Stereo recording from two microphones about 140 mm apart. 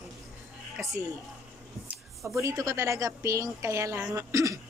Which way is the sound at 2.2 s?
20° right (ahead or behind).